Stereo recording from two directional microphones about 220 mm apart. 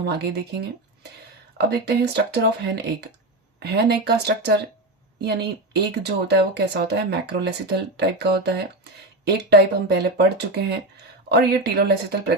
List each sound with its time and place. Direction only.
0.0 s speech: 50° right (ahead or behind)
1.5 s speech: 50° right (ahead or behind)
11.3 s speech: 45° right (ahead or behind)